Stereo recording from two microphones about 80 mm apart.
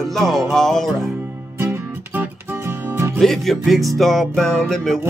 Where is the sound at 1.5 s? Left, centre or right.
Right.